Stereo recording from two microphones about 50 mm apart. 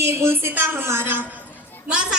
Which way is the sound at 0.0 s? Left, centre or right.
Right.